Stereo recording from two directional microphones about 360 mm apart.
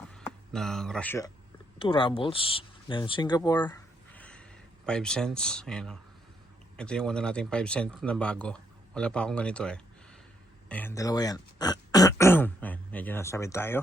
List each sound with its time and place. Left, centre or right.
0.1 s speech: centre
10.7 s throat clearing: centre